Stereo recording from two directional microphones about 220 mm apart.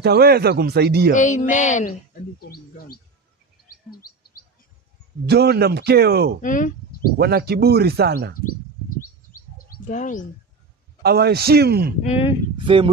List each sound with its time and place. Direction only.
0.0 s speech: 45° right (ahead or behind)
1.1 s a woman's voice: 35° left (ahead or behind)
5.3 s speech: 45° right (ahead or behind)
6.4 s speech: 35° left (ahead or behind)
7.2 s speech: 45° right (ahead or behind)
8.9 s bird: 40° left (ahead or behind)
11.0 s speech: 45° right (ahead or behind)
12.0 s speech: 25° left (ahead or behind)
12.6 s speech: 25° right (ahead or behind)